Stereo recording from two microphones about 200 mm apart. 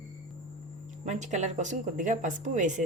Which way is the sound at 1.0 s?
35° right (ahead or behind).